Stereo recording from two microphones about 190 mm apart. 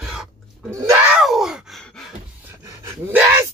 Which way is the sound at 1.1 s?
Centre (ahead or behind).